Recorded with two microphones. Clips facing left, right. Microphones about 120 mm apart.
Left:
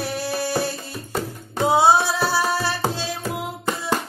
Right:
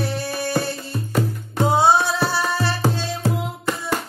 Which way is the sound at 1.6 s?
10° left (ahead or behind).